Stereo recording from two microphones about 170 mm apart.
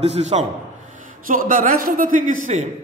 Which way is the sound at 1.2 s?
55° right (ahead or behind).